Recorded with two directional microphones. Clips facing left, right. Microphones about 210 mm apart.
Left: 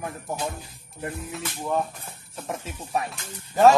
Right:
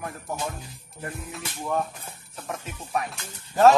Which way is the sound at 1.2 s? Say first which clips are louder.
Left 2 dB; centre (ahead or behind).